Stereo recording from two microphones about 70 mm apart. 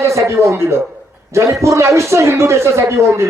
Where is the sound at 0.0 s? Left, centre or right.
Right.